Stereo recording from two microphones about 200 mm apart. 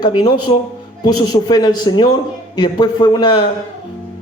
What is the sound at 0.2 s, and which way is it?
A man's voice, 20° left (ahead or behind).